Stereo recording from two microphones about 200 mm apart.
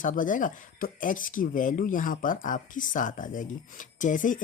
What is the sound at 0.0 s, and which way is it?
Speech, 40° left (ahead or behind).